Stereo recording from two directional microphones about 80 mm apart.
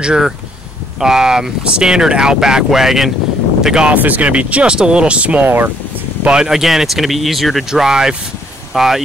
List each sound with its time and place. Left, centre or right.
0.0 s speech: centre
3.9 s speech: right
6.2 s speech: centre